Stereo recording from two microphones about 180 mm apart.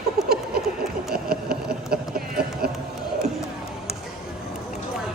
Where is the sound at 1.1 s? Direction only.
60° right (ahead or behind).